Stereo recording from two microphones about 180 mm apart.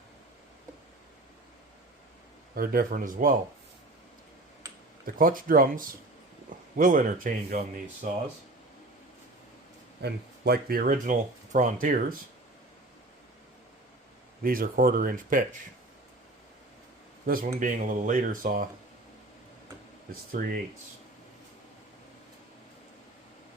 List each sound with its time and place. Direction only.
2.6 s speech: 55° right (ahead or behind)
5.0 s speech: 50° right (ahead or behind)
10.0 s speech: 60° right (ahead or behind)
14.4 s speech: 55° right (ahead or behind)
17.2 s speech: 50° right (ahead or behind)
20.3 s speech: 55° right (ahead or behind)